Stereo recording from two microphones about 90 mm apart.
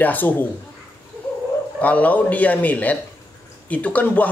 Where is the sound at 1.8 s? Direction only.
15° left (ahead or behind).